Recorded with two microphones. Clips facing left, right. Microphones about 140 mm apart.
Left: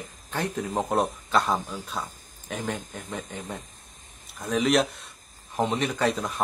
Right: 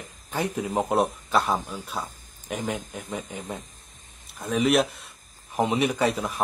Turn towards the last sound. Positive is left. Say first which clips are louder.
# right 1 dB
turn(degrees=0)  # may be behind; listen again after turning